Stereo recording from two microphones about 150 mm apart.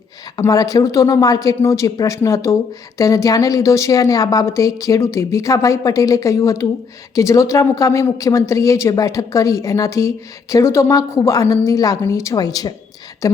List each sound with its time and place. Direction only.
0.3 s a woman's voice: 25° left (ahead or behind)